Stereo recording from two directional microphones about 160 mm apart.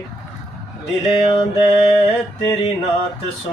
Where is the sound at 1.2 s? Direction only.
35° left (ahead or behind).